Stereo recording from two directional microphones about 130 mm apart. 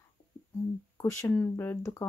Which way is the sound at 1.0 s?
20° left (ahead or behind).